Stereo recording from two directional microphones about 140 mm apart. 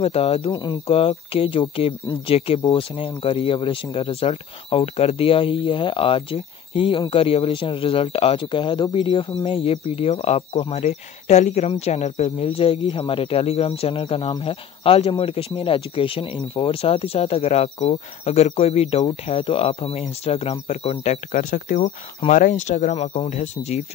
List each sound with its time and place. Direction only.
0.0 s speech: 45° left (ahead or behind)
0.5 s speech: 30° left (ahead or behind)
0.8 s speech: 45° left (ahead or behind)
10.8 s speech: 55° left (ahead or behind)